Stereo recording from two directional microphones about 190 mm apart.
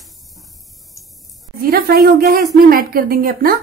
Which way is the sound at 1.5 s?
50° right (ahead or behind).